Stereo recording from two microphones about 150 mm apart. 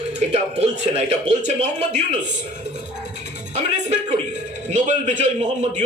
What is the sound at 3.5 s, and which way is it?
A man's voice, 50° right (ahead or behind).